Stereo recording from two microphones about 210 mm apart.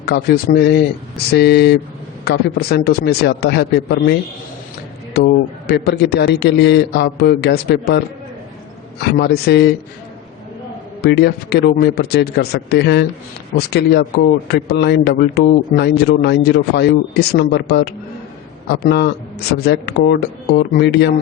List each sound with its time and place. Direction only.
0.0 s a man's voice: 50° left (ahead or behind)
11.0 s a man's voice: 50° left (ahead or behind)